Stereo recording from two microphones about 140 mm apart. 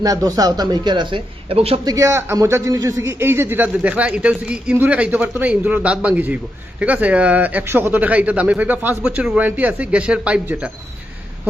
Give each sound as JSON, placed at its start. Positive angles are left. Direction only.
{"t": 0.0, "sound": "speech", "side_deg": -25}
{"t": 1.8, "sound": "a man's voice", "side_deg": -25}